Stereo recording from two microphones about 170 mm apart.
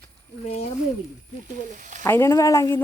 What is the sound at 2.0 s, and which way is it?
Speech, 15° left (ahead or behind).